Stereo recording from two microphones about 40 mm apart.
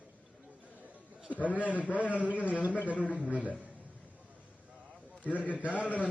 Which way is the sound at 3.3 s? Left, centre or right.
Right.